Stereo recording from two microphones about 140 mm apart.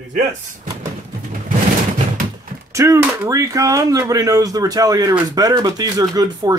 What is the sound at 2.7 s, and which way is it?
Speech, 20° right (ahead or behind).